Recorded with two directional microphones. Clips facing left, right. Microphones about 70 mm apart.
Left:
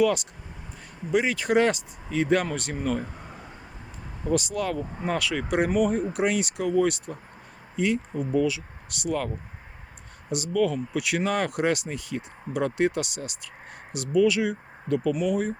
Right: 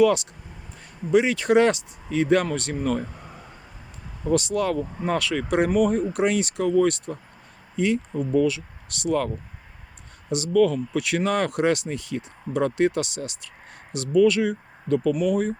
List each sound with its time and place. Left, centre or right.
0.0 s speech: centre
4.3 s speech: centre